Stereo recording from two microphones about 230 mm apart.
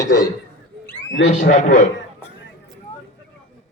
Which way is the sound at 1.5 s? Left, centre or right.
Left.